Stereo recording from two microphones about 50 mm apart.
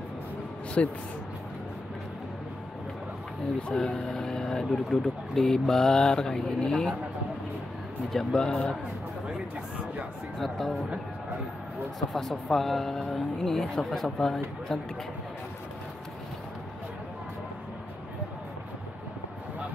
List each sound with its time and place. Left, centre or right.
0.8 s speech: left
3.7 s speech: centre
8.1 s speech: centre
10.4 s speech: centre
12.1 s speech: centre